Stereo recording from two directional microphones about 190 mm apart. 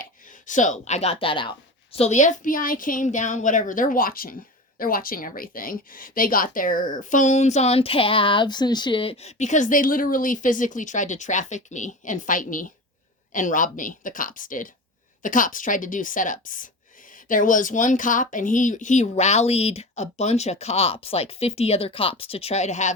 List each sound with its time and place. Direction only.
0.0 s speech: 45° left (ahead or behind)